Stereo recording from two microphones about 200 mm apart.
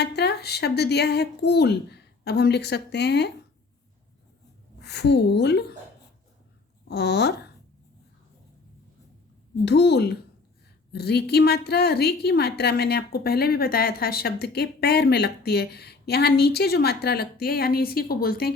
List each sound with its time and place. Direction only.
0.0 s speech: 55° left (ahead or behind)
4.8 s speech: 55° left (ahead or behind)
6.8 s speech: 55° left (ahead or behind)
9.6 s a woman's voice: 55° left (ahead or behind)